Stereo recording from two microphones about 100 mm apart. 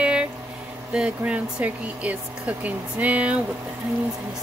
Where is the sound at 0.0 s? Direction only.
10° right (ahead or behind).